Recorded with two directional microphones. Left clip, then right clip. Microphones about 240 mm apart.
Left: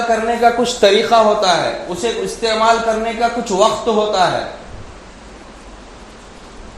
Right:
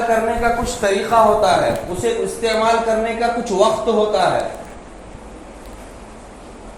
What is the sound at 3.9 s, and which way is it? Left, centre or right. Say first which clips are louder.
Speech: left 1 dB; left.